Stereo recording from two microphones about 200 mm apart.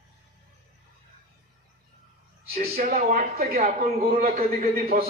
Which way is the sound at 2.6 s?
45° right (ahead or behind).